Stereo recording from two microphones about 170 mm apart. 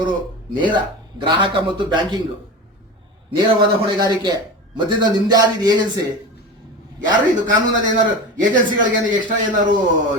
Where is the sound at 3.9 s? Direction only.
25° right (ahead or behind).